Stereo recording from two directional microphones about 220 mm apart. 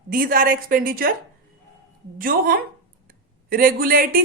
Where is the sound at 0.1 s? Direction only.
40° right (ahead or behind).